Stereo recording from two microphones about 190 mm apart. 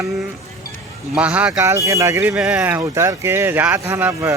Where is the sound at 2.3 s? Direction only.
5° right (ahead or behind).